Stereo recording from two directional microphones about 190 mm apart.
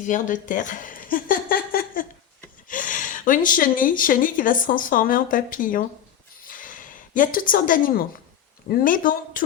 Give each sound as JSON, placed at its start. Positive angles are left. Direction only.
{"t": 0.0, "sound": "speech", "side_deg": 40}
{"t": 6.4, "sound": "a sound", "side_deg": 45}
{"t": 8.7, "sound": "speech", "side_deg": 45}